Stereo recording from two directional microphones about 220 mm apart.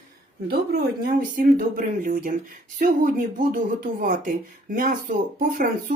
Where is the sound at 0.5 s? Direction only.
45° right (ahead or behind).